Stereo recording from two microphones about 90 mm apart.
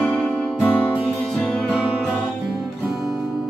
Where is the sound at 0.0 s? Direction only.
10° left (ahead or behind).